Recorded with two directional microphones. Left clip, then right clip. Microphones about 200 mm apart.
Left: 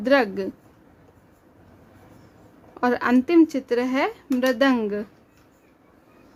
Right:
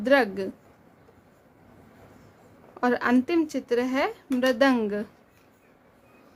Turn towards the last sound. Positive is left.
turn(degrees=10)  # may be behind; listen again after turning